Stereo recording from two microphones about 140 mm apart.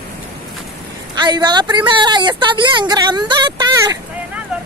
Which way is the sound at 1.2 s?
30° right (ahead or behind).